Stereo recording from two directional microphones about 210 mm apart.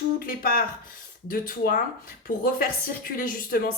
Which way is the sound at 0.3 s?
45° left (ahead or behind).